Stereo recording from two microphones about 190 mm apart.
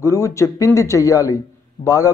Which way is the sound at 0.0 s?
15° left (ahead or behind).